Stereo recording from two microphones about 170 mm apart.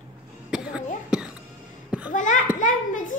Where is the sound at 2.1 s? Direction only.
45° left (ahead or behind).